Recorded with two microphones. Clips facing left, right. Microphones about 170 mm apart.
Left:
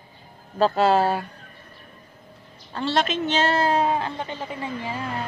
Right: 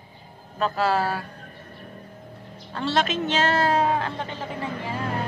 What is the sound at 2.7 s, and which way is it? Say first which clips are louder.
Speech: left 1 dB; centre (ahead or behind).